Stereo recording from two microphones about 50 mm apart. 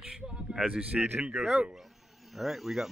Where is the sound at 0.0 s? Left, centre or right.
Centre.